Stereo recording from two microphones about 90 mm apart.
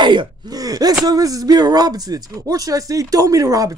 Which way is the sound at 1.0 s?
45° right (ahead or behind).